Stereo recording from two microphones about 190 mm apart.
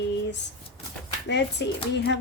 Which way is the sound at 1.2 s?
65° left (ahead or behind).